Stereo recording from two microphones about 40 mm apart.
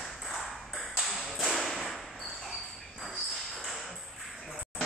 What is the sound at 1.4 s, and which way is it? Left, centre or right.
Tap, centre.